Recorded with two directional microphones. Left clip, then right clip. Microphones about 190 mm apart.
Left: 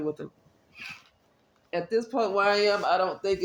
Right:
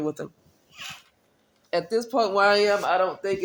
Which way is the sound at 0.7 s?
40° right (ahead or behind).